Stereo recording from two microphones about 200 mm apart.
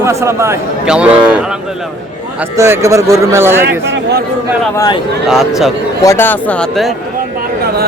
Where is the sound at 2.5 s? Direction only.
15° right (ahead or behind).